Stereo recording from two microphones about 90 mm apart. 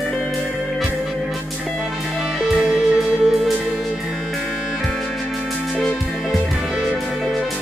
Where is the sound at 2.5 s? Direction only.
Centre (ahead or behind).